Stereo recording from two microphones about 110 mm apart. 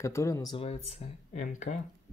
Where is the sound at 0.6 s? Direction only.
65° left (ahead or behind).